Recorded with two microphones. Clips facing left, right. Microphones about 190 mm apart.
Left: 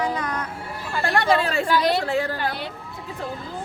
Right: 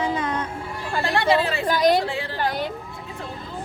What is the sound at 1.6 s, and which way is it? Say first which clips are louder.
Speech: right 4 dB; 45° right (ahead or behind).